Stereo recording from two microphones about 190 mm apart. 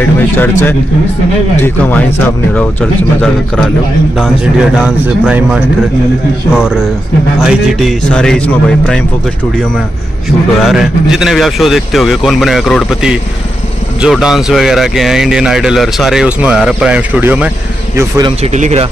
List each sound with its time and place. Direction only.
0.0 s a man's voice: 10° left (ahead or behind)
10.6 s speech: centre (ahead or behind); by 18.3 s 20° right (ahead or behind)
18.4 s speech: 35° right (ahead or behind)